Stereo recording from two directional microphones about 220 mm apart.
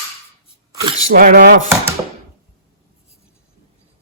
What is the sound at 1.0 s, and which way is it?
Speech, 40° right (ahead or behind).